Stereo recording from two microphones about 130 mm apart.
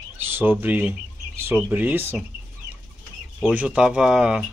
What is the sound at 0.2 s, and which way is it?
Speech, 15° right (ahead or behind).